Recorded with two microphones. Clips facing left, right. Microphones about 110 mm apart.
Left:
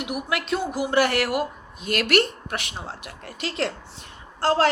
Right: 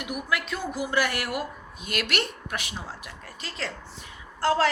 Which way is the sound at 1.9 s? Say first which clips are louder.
Left 8 dB; 50° left (ahead or behind).